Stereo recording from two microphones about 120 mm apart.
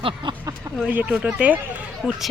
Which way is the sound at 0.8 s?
10° right (ahead or behind).